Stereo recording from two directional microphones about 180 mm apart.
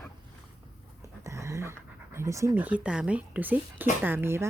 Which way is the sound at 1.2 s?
15° right (ahead or behind).